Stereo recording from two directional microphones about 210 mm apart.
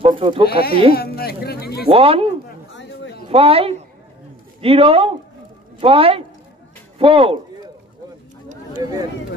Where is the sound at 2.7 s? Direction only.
60° left (ahead or behind).